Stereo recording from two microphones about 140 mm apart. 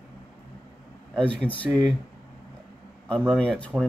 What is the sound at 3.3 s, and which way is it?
Speech, 5° left (ahead or behind).